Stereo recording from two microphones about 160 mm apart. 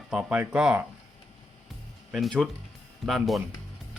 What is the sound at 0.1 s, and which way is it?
Speech, 5° right (ahead or behind).